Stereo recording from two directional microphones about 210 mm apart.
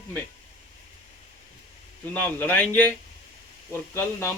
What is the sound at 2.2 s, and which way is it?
A man's voice, 10° left (ahead or behind).